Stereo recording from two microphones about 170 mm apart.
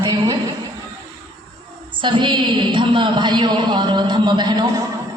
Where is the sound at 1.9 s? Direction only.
30° right (ahead or behind).